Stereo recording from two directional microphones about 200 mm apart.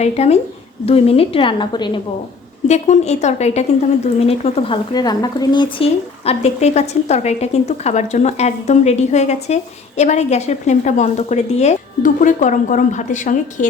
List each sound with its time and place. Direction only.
0.0 s a woman's voice: 30° left (ahead or behind)
2.6 s speech: 35° left (ahead or behind)